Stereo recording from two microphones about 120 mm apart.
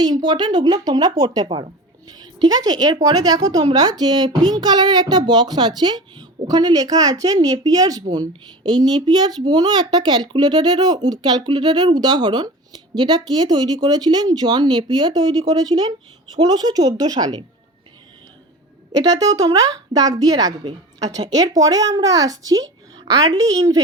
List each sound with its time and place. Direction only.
0.0 s speech: 35° right (ahead or behind)
19.0 s a woman's voice: 30° right (ahead or behind)